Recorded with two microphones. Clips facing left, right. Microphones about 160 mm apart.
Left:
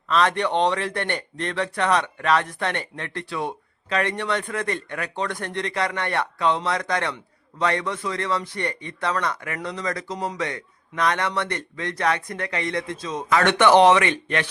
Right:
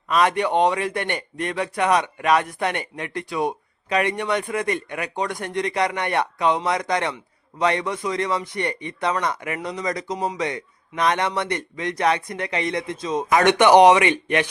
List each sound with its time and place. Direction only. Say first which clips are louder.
0.1 s speech: right 2 dB; 10° right (ahead or behind)